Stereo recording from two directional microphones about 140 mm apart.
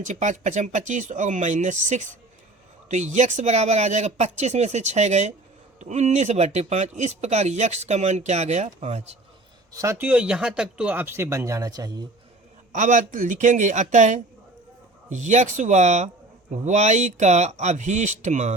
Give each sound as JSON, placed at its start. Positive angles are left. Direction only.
{"t": 0.0, "sound": "speech", "side_deg": -60}
{"t": 9.7, "sound": "speech", "side_deg": -20}
{"t": 10.1, "sound": "speech", "side_deg": -10}
{"t": 12.7, "sound": "speech", "side_deg": -60}